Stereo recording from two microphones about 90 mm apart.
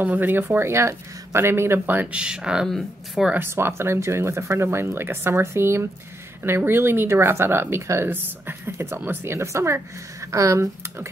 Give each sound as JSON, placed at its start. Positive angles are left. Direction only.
{"t": 0.0, "sound": "speech", "side_deg": -20}
{"t": 3.3, "sound": "speech", "side_deg": -30}